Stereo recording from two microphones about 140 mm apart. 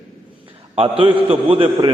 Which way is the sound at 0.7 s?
40° right (ahead or behind).